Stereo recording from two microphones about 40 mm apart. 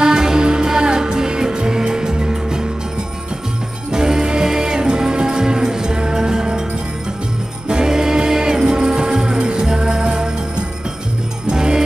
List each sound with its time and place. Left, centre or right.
0.0 s music: centre
3.9 s music: centre
7.6 s music: centre
11.4 s music: centre